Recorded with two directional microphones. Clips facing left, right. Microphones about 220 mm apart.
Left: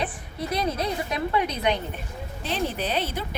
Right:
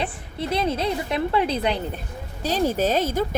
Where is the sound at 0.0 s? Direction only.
25° right (ahead or behind).